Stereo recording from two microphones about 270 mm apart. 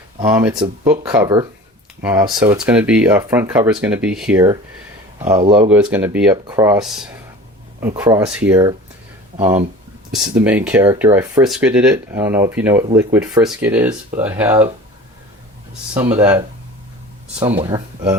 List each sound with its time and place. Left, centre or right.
0.2 s speech: centre
5.5 s speech: centre
10.1 s speech: centre
16.0 s speech: centre
17.4 s speech: centre